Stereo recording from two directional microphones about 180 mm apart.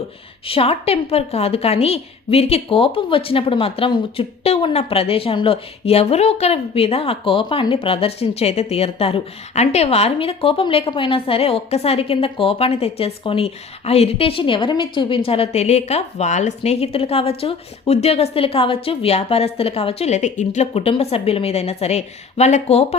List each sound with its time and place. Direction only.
0.4 s a woman's voice: 30° left (ahead or behind)